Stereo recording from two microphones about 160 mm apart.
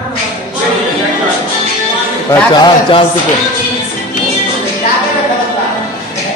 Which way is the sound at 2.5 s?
30° left (ahead or behind).